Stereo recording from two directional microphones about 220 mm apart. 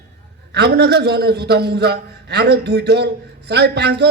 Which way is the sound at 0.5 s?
50° right (ahead or behind).